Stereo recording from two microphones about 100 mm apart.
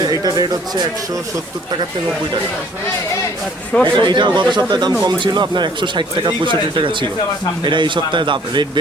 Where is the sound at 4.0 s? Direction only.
50° right (ahead or behind).